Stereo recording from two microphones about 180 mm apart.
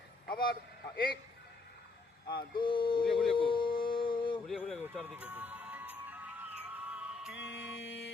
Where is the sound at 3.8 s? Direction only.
30° left (ahead or behind).